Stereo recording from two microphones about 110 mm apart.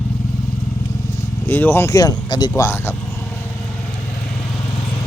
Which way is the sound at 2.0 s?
35° left (ahead or behind).